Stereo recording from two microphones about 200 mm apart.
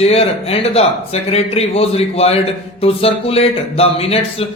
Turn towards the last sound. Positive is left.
turn(degrees=30)  # may be behind; listen again after turning